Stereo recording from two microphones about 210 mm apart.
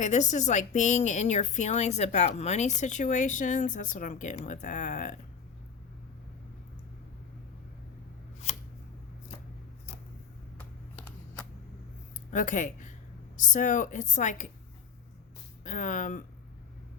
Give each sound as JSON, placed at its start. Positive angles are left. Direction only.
{"t": 0.0, "sound": "speech", "side_deg": 35}
{"t": 12.3, "sound": "speech", "side_deg": 35}
{"t": 15.6, "sound": "speech", "side_deg": 40}